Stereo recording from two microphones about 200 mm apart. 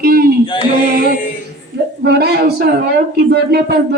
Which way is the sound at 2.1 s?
50° right (ahead or behind).